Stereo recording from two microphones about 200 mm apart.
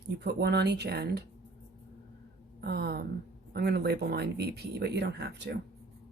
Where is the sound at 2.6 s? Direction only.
55° right (ahead or behind).